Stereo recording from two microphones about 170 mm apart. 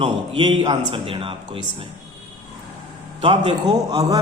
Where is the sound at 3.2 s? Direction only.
30° right (ahead or behind).